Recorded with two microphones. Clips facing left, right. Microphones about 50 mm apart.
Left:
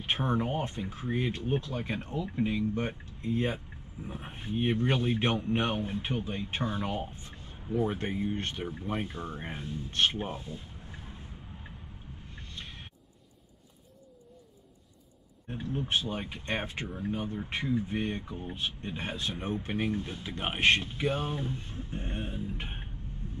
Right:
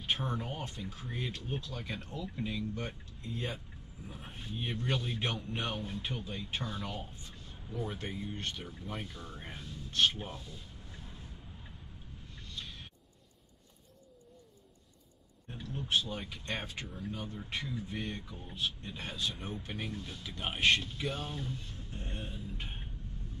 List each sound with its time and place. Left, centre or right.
0.0 s speech: left
12.4 s a sound: left
15.4 s speech: left